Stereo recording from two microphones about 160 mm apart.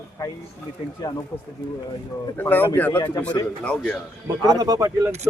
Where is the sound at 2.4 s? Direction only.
10° left (ahead or behind).